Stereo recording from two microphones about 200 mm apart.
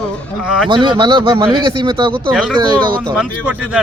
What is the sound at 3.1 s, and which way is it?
Speech, centre (ahead or behind).